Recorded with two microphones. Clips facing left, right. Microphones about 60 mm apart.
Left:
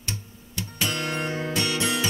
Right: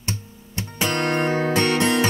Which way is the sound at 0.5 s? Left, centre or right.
Right.